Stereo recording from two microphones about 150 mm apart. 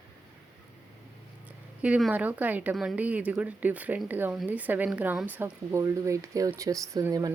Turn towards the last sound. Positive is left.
turn(degrees=-20)  # may be behind; listen again after turning